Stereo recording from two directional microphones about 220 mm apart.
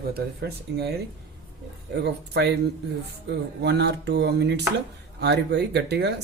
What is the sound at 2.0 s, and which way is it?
Speech, 50° right (ahead or behind).